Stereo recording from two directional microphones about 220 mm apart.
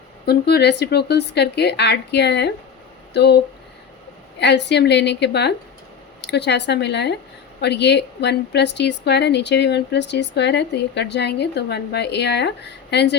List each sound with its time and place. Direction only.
0.3 s a woman's voice: 50° left (ahead or behind)
4.4 s a woman's voice: 50° left (ahead or behind)